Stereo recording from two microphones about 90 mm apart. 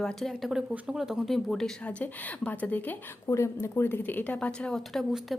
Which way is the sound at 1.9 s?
15° left (ahead or behind).